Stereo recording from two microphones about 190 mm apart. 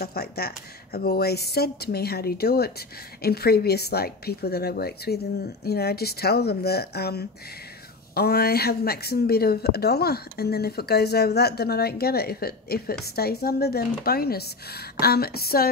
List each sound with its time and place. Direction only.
0.0 s speech: 55° left (ahead or behind)